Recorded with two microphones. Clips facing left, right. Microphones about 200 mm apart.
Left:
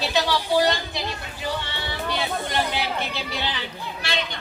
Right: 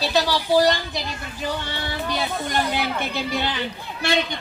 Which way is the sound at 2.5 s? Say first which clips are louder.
Right 4 dB; 50° right (ahead or behind).